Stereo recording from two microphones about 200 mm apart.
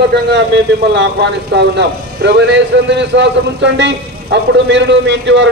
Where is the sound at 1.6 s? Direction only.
60° right (ahead or behind).